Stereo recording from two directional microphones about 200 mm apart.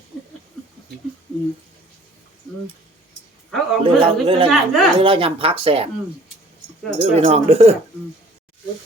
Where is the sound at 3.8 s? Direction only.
25° right (ahead or behind).